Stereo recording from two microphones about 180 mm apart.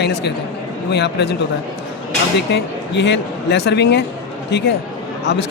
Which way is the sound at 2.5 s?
75° left (ahead or behind).